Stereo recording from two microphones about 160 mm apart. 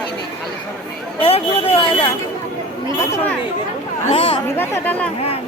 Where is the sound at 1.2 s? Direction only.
35° left (ahead or behind).